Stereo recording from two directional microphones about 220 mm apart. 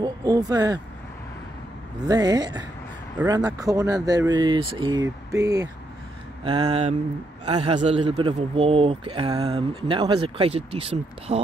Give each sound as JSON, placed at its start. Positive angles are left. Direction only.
{"t": 0.0, "sound": "speech", "side_deg": -15}
{"t": 2.0, "sound": "speech", "side_deg": -15}
{"t": 3.2, "sound": "speech", "side_deg": -5}